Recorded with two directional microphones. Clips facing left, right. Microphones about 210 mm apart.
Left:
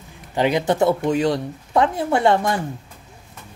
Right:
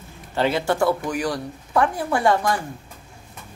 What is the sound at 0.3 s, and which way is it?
Speech, 15° left (ahead or behind).